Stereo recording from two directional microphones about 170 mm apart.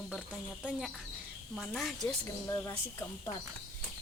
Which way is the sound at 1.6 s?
Centre (ahead or behind).